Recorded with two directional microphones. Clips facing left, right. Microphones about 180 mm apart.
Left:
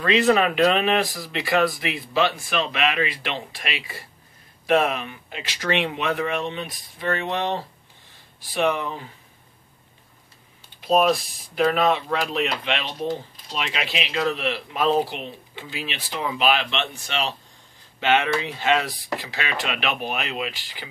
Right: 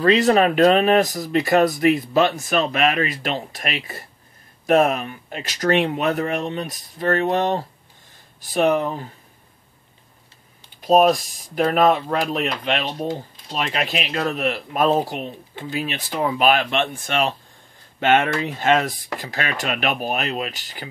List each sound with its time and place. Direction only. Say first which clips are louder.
0.0 s speech: right 3 dB; 40° right (ahead or behind)
10.8 s speech: right 4 dB; 40° right (ahead or behind)